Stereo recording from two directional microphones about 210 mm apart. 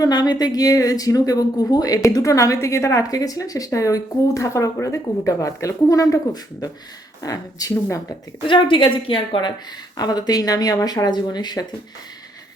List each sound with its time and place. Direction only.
0.0 s a woman's voice: 20° left (ahead or behind)